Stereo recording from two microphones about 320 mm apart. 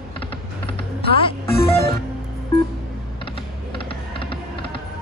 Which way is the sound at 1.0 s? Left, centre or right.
Centre.